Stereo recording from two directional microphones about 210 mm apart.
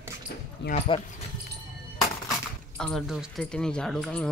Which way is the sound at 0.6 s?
55° left (ahead or behind).